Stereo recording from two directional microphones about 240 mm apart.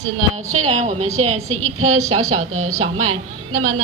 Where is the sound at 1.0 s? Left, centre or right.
Right.